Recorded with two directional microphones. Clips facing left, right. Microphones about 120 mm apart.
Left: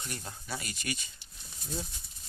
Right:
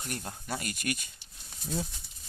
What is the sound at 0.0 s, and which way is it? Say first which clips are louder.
Speech: right 3 dB; 45° right (ahead or behind).